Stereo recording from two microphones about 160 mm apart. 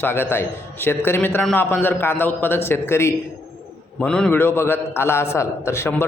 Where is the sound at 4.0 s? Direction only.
5° left (ahead or behind).